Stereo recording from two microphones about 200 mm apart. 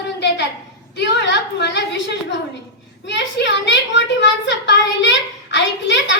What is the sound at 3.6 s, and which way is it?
A child's voice, 65° left (ahead or behind).